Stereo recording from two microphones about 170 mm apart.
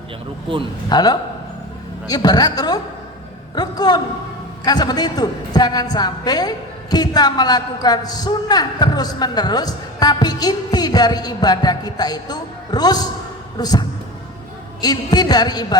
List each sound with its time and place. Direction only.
0.9 s a man's voice: 25° left (ahead or behind)